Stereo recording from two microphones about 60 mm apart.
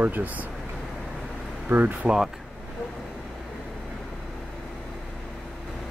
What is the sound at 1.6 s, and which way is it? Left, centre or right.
Speech, right.